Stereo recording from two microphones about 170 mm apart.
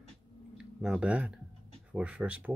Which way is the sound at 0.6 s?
5° right (ahead or behind).